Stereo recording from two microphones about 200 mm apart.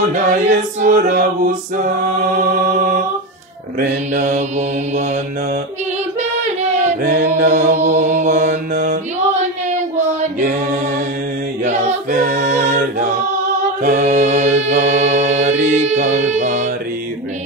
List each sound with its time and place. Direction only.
0.1 s a capella: 40° right (ahead or behind)
4.1 s a capella: 40° right (ahead or behind)
7.0 s music: 40° right (ahead or behind)
9.8 s child singing: 35° right (ahead or behind)
11.6 s choir: 35° right (ahead or behind)
13.8 s mantra: 35° right (ahead or behind)